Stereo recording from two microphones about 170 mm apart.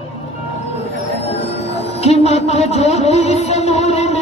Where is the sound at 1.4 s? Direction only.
35° left (ahead or behind).